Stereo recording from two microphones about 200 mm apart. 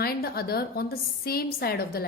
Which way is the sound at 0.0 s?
50° left (ahead or behind).